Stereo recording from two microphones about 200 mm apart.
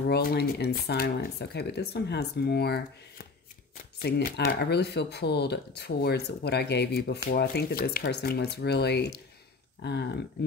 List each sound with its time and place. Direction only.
0.0 s speech: 50° left (ahead or behind)